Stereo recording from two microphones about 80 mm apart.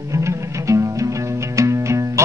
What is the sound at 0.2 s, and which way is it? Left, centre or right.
Music, right.